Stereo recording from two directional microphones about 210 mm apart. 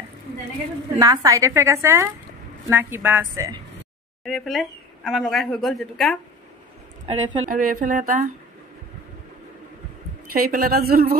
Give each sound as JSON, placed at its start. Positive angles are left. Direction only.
{"t": 0.9, "sound": "a woman's voice", "side_deg": -15}
{"t": 4.2, "sound": "speech", "side_deg": 0}
{"t": 7.4, "sound": "speech", "side_deg": -40}
{"t": 10.3, "sound": "a woman's voice", "side_deg": -45}